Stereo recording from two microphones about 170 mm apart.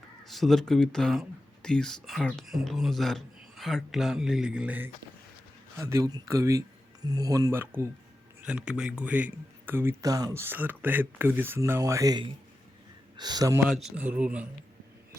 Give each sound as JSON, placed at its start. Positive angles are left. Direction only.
{"t": 0.3, "sound": "speech", "side_deg": 0}
{"t": 13.7, "sound": "speech", "side_deg": 0}